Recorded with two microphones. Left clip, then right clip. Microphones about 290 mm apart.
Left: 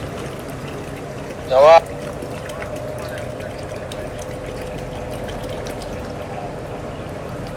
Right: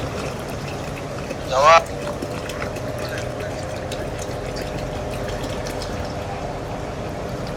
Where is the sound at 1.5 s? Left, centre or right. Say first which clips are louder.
Left 4 dB; centre.